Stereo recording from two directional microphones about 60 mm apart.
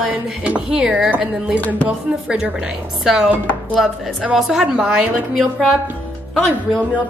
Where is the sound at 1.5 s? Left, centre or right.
Left.